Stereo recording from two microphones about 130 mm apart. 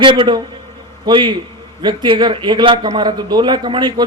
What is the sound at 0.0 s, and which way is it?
A man's voice, 40° right (ahead or behind).